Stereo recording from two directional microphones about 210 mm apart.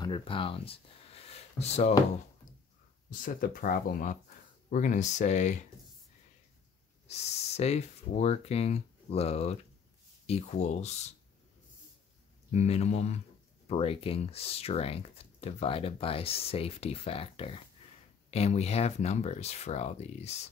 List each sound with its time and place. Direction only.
0.0 s speech: 25° left (ahead or behind)
3.1 s speech: 40° left (ahead or behind)
7.1 s speech: 30° left (ahead or behind)
12.5 s speech: 30° left (ahead or behind)